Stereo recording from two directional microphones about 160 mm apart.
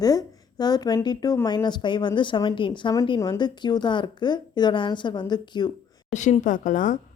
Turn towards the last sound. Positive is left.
turn(degrees=50)  # may be behind; listen again after turning